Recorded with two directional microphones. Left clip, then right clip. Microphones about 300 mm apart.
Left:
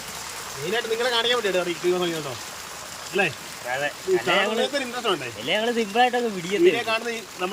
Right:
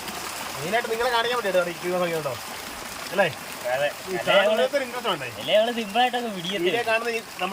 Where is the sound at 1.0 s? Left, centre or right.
Centre.